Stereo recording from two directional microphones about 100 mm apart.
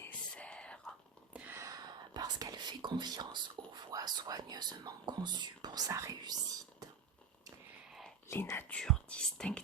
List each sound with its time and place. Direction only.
0.0 s whispering: 10° left (ahead or behind)
1.3 s a sound: 15° right (ahead or behind)
1.5 s whispering: 35° right (ahead or behind)
8.3 s speech: 25° left (ahead or behind)
8.7 s whispering: 10° left (ahead or behind)